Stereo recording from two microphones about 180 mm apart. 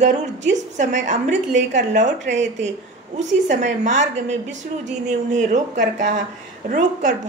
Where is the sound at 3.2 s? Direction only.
40° right (ahead or behind).